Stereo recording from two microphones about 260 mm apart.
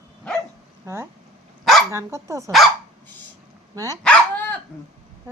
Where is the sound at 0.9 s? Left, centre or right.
Centre.